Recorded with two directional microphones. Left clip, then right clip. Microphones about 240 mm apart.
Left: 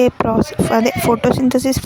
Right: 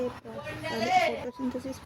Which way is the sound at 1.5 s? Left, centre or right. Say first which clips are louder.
Left 19 dB; left.